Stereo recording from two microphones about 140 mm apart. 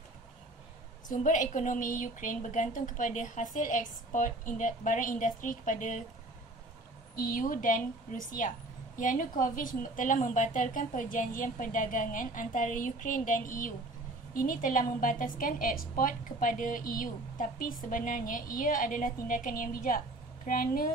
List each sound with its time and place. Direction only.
1.0 s a woman's voice: 65° left (ahead or behind)
7.2 s a woman's voice: 90° left
14.3 s a woman's voice: 85° left